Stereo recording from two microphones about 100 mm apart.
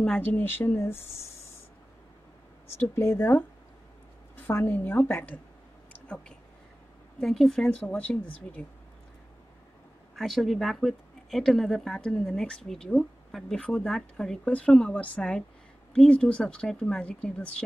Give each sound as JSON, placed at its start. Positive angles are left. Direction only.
{"t": 0.0, "sound": "a woman's voice", "side_deg": 15}
{"t": 1.1, "sound": "a sound", "side_deg": 25}
{"t": 2.7, "sound": "a woman's voice", "side_deg": 25}
{"t": 7.2, "sound": "speech", "side_deg": 5}
{"t": 10.1, "sound": "speech", "side_deg": 0}